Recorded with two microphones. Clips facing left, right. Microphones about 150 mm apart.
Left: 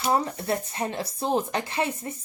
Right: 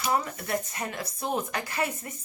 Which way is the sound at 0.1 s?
30° left (ahead or behind).